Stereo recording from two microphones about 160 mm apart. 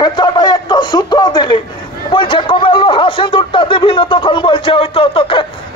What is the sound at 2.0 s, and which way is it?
Speech, 30° left (ahead or behind).